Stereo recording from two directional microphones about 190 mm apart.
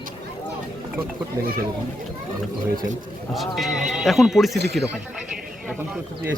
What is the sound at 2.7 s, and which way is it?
Speech, 45° right (ahead or behind).